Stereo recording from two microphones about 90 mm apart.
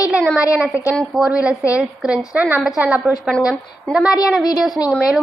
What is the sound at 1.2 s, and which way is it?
A woman's voice, 5° right (ahead or behind).